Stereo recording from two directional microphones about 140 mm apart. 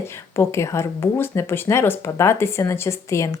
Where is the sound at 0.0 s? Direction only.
20° left (ahead or behind).